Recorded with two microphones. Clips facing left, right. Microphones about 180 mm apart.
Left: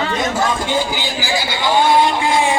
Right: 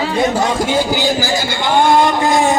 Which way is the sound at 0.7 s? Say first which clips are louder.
Right 5 dB; 45° right (ahead or behind).